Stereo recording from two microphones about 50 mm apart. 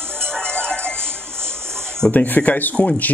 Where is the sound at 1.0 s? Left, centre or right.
Right.